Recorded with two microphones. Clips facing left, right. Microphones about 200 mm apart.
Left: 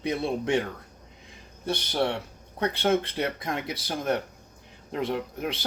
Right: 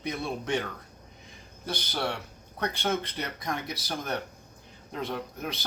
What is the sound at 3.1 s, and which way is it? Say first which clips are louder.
Speech: left 5 dB; 25° left (ahead or behind).